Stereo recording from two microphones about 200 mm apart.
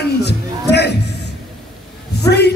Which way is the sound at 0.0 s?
55° left (ahead or behind).